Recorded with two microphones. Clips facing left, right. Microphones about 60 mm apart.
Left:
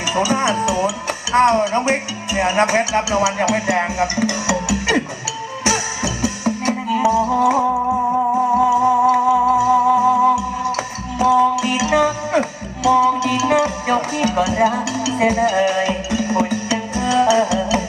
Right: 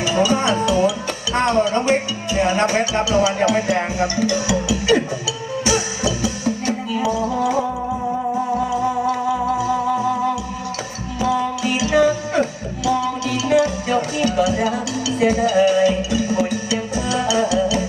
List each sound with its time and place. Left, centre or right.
0.0 s speech: left
5.6 s music: left
8.7 s music: left